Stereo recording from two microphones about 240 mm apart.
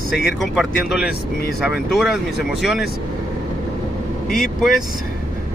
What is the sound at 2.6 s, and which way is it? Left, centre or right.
Speech, centre.